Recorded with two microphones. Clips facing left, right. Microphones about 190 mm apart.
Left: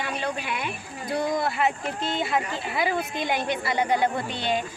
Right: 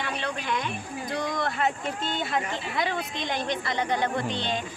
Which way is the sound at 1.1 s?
5° left (ahead or behind).